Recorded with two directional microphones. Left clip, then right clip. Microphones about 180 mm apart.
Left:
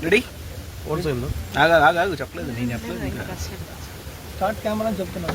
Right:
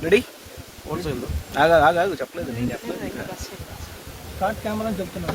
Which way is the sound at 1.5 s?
55° right (ahead or behind).